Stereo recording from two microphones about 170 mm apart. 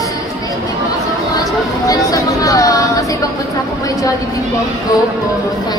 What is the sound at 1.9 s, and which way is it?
Speech, 20° left (ahead or behind).